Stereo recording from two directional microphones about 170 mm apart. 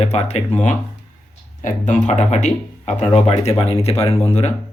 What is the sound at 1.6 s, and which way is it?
A man's voice, 45° left (ahead or behind).